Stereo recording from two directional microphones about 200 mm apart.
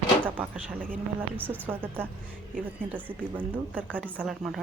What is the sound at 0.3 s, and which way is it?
Speech, 10° right (ahead or behind).